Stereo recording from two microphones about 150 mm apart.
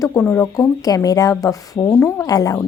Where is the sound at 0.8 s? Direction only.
25° left (ahead or behind).